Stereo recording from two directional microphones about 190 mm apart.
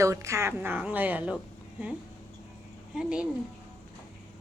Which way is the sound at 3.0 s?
5° right (ahead or behind).